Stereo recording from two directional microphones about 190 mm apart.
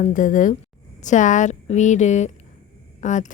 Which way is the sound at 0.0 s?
45° left (ahead or behind).